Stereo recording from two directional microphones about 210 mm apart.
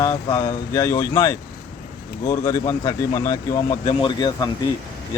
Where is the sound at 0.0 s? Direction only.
15° left (ahead or behind).